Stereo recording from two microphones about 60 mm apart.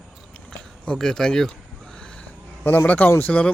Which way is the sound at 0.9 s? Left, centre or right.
Centre.